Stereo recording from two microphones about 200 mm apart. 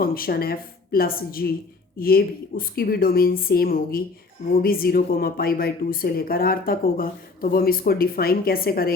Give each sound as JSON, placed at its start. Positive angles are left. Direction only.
{"t": 0.0, "sound": "a woman's voice", "side_deg": 45}